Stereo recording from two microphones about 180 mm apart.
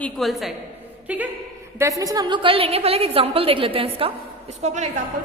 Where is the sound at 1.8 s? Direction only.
20° right (ahead or behind).